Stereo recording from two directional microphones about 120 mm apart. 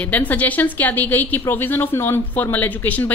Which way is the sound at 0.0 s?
15° left (ahead or behind).